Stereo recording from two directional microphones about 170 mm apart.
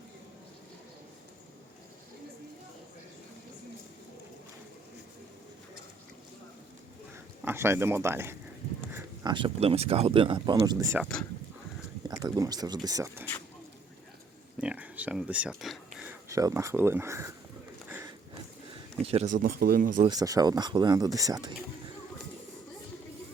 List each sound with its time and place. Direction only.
7.4 s speech: 15° right (ahead or behind)
9.2 s speech: 30° right (ahead or behind)
11.0 s speech: 5° left (ahead or behind)
12.0 s speech: 20° right (ahead or behind)
14.6 s speech: 5° right (ahead or behind)
16.3 s speech: 20° right (ahead or behind)
17.8 s a sound: 10° right (ahead or behind)
19.0 s speech: 40° right (ahead or behind)
19.5 s speech: 60° right (ahead or behind)
20.1 s speech: 20° right (ahead or behind)